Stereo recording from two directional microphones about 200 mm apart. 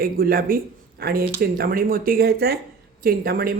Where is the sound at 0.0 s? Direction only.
45° right (ahead or behind).